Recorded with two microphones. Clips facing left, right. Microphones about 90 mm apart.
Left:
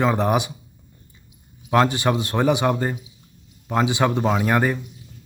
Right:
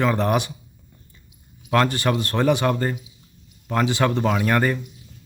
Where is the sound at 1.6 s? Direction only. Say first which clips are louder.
Left 1 dB; 20° left (ahead or behind).